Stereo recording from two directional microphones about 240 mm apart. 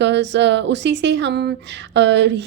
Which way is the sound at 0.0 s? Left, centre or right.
Right.